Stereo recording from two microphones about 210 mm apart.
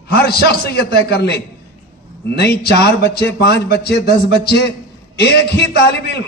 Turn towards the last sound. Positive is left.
turn(degrees=50)  # may be behind; listen again after turning